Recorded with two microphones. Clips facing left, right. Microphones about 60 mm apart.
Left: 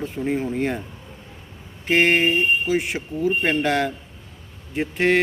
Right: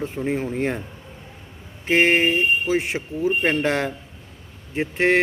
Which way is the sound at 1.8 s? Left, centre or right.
Right.